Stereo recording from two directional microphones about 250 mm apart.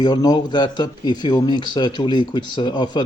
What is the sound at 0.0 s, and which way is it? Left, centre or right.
A man's voice, centre.